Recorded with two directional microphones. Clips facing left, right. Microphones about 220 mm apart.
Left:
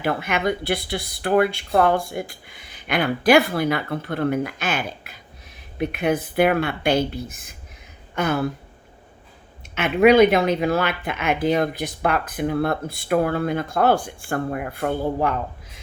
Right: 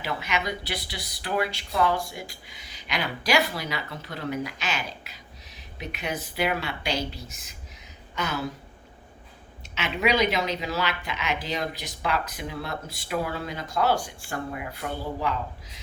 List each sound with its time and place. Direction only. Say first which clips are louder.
0.0 s speech: left 7 dB; 55° left (ahead or behind)
9.7 s speech: left 11 dB; 55° left (ahead or behind)